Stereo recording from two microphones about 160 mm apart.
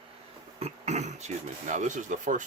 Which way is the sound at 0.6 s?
45° right (ahead or behind).